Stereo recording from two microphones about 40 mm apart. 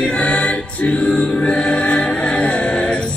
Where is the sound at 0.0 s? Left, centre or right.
Left.